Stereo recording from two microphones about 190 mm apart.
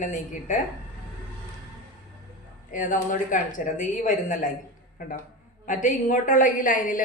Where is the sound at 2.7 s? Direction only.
45° left (ahead or behind).